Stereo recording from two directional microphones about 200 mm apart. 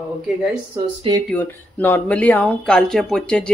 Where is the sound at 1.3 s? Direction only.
10° left (ahead or behind).